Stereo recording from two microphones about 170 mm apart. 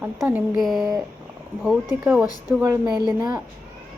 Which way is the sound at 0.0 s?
5° right (ahead or behind).